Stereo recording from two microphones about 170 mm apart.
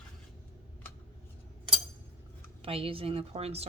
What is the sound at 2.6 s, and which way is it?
A woman's voice, 35° right (ahead or behind).